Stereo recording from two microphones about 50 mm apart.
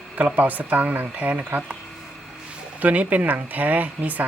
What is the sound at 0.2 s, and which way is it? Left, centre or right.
Speech, right.